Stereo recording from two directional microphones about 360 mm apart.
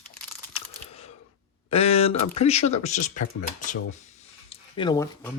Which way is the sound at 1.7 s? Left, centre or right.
Centre.